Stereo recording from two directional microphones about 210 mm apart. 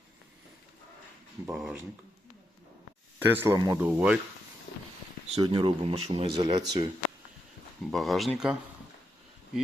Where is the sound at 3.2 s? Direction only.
10° right (ahead or behind).